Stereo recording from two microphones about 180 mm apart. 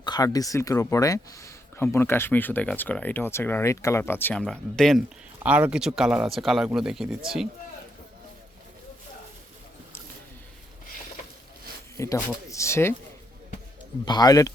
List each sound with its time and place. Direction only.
0.0 s speech: 20° left (ahead or behind); by 5.0 s centre (ahead or behind)
5.4 s speech: 10° right (ahead or behind)
11.9 s speech: 15° left (ahead or behind)
14.0 s speech: 25° left (ahead or behind)